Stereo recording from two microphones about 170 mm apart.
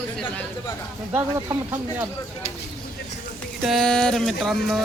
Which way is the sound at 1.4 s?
15° right (ahead or behind).